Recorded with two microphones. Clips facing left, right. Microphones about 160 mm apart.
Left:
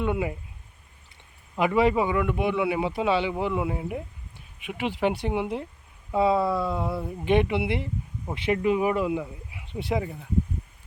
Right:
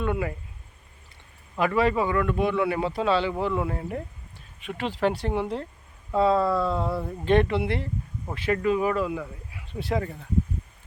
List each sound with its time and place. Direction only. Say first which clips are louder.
0.0 s speech: left 1 dB; 15° left (ahead or behind)
1.5 s speech: left 1 dB; 15° left (ahead or behind)